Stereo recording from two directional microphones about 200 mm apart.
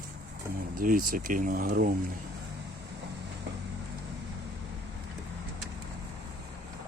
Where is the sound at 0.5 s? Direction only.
45° right (ahead or behind).